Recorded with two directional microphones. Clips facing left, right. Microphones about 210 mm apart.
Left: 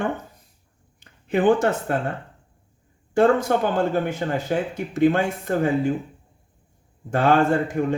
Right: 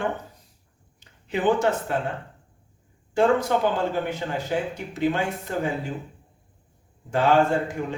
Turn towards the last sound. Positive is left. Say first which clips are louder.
# left 2 dB
turn(degrees=55)  # may be behind; listen again after turning